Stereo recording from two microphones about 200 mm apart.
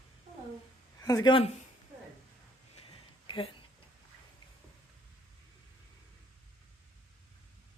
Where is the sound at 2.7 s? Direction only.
25° left (ahead or behind).